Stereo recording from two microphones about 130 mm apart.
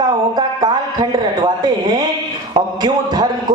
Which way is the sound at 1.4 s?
30° right (ahead or behind).